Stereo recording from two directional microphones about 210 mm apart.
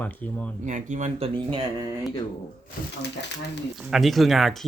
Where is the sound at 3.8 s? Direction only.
Centre (ahead or behind).